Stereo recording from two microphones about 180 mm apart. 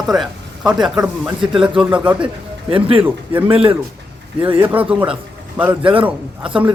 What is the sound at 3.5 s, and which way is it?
Speech, 30° right (ahead or behind).